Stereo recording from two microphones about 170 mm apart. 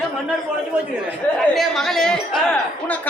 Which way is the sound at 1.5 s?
Centre (ahead or behind).